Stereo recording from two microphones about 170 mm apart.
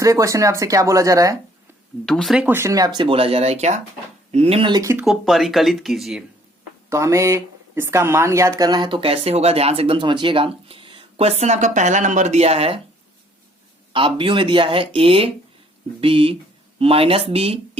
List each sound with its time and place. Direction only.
0.0 s speech: 20° right (ahead or behind)
2.0 s speech: centre (ahead or behind); by 5.0 s 15° right (ahead or behind)
5.0 s speech: centre (ahead or behind)
6.9 s speech: 15° right (ahead or behind); by 12.8 s 35° right (ahead or behind)
13.9 s speech: 30° right (ahead or behind)